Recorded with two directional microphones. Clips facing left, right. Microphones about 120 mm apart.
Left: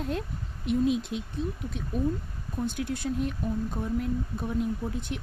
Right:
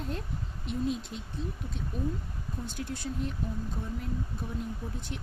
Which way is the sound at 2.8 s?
60° left (ahead or behind).